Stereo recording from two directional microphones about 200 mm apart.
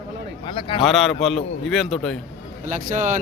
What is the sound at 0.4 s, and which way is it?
Speech, 25° left (ahead or behind).